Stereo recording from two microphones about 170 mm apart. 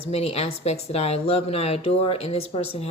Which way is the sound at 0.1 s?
35° left (ahead or behind).